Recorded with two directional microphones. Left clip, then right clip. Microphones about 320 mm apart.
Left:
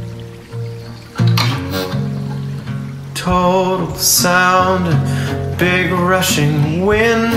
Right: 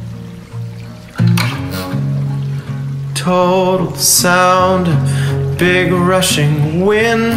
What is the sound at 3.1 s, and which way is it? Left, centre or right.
Music, centre.